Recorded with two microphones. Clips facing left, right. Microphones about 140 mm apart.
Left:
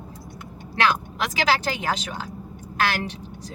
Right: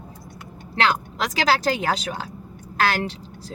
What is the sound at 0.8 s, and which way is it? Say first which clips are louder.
A woman's voice: right 1 dB; 35° right (ahead or behind).